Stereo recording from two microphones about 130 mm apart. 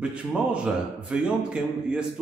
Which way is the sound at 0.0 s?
10° right (ahead or behind).